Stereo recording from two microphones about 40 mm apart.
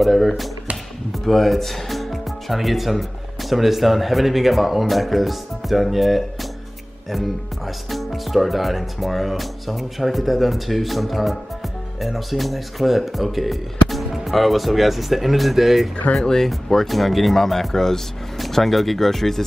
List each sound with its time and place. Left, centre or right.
0.0 s speech: centre
16.2 s speech: centre